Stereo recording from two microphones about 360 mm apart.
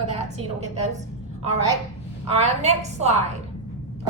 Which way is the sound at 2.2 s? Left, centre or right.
Centre.